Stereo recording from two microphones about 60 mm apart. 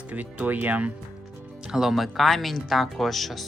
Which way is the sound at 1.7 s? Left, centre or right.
Centre.